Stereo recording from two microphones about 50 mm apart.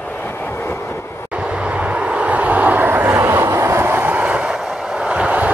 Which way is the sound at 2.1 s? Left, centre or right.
Right.